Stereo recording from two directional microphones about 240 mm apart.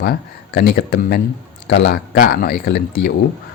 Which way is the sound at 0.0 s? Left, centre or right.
Left.